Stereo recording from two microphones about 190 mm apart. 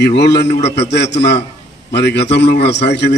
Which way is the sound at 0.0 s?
60° left (ahead or behind).